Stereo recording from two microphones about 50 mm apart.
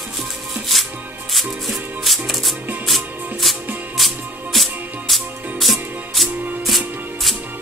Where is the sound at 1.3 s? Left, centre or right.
Centre.